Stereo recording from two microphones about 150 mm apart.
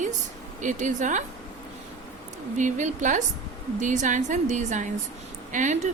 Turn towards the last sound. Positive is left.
turn(degrees=-55)  # may be behind; listen again after turning